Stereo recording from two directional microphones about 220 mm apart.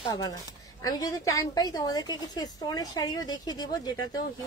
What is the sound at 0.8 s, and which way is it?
A woman's voice, 15° left (ahead or behind).